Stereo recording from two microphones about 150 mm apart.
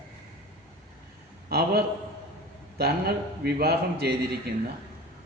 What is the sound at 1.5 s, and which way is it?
Speech, 90° right.